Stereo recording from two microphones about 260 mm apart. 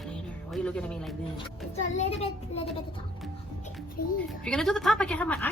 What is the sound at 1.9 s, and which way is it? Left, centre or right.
Speech, left.